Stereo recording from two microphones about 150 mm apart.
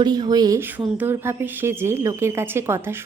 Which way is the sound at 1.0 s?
15° right (ahead or behind).